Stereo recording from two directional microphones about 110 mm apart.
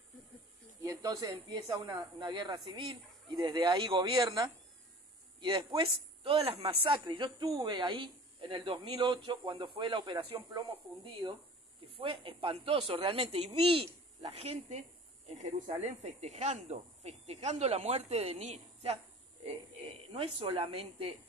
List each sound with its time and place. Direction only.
0.7 s speech: 30° right (ahead or behind); by 4.3 s 50° right (ahead or behind)
5.4 s speech: 45° right (ahead or behind)
6.2 s speech: 55° right (ahead or behind)
11.2 s speech: 30° right (ahead or behind)
11.9 s speech: 50° right (ahead or behind)
14.3 s speech: 70° right (ahead or behind)
15.2 s speech: 90° right; by 21.2 s 60° right (ahead or behind)